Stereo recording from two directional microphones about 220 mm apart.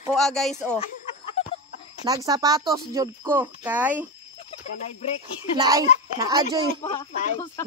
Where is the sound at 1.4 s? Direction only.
25° left (ahead or behind).